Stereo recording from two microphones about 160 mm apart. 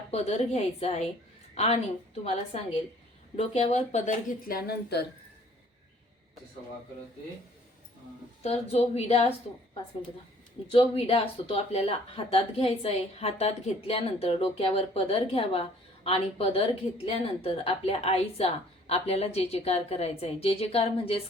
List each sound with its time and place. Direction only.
0.1 s speech: 40° left (ahead or behind)
4.4 s speech: 70° left (ahead or behind)
8.4 s speech: 40° left (ahead or behind)
10.7 s speech: 35° left (ahead or behind)